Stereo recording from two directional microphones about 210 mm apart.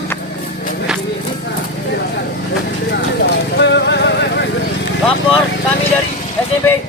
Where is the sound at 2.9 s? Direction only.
55° left (ahead or behind).